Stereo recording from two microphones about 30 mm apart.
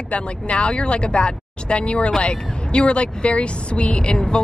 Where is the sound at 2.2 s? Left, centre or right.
Left.